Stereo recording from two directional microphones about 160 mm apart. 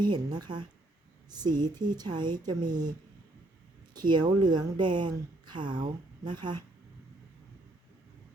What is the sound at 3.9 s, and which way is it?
Speech, 25° right (ahead or behind).